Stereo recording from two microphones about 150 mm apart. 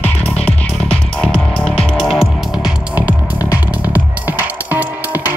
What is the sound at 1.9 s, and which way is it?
Music, 5° right (ahead or behind).